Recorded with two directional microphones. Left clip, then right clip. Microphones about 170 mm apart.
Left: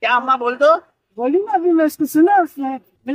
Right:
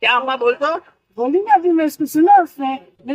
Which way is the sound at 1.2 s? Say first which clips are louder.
Right 3 dB; centre (ahead or behind).